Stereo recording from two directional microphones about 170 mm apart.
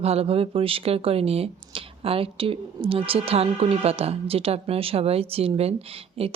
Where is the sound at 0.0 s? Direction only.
35° right (ahead or behind).